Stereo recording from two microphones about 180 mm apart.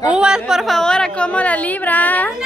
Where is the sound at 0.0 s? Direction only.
5° right (ahead or behind).